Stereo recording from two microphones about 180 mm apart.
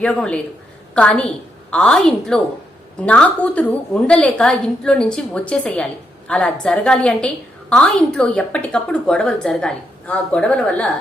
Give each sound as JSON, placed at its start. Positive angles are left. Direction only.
{"t": 0.0, "sound": "a woman's voice", "side_deg": 5}